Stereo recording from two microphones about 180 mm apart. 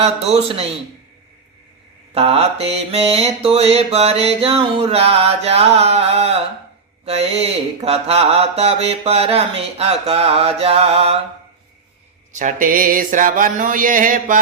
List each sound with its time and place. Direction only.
0.0 s mantra: 35° right (ahead or behind)
2.1 s mantra: 35° right (ahead or behind)
12.3 s a sound: 45° right (ahead or behind)